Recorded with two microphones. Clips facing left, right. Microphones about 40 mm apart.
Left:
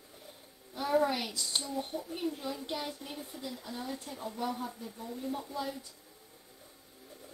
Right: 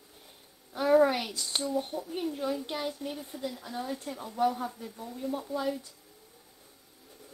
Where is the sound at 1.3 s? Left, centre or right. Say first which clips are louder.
Right 1 dB; right.